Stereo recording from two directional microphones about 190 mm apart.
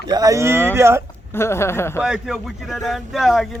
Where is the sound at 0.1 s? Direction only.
20° right (ahead or behind).